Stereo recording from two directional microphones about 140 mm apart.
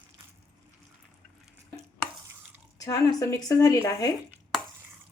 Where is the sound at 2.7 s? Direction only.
25° left (ahead or behind).